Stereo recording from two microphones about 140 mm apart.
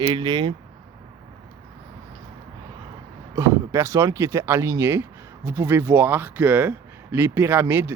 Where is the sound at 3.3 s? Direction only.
20° right (ahead or behind).